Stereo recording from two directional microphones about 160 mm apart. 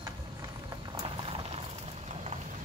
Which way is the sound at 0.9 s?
30° right (ahead or behind).